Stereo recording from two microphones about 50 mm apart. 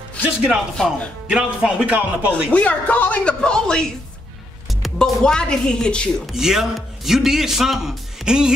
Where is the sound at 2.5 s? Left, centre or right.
Left.